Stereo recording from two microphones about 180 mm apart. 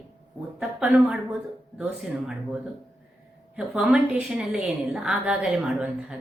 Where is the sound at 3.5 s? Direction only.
5° right (ahead or behind).